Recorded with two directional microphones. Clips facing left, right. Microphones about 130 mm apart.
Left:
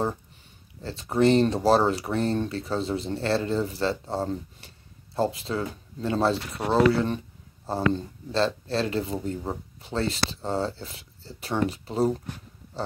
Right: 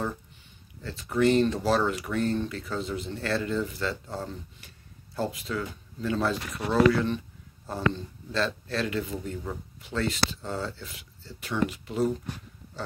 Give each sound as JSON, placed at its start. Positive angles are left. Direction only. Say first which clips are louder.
{"t": 0.8, "sound": "speech", "louder": "left 2 dB", "side_deg": 30}